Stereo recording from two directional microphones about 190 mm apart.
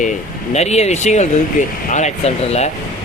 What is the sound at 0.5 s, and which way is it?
Speech, 35° left (ahead or behind).